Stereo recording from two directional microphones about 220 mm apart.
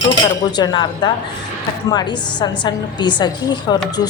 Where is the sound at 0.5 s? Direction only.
20° left (ahead or behind).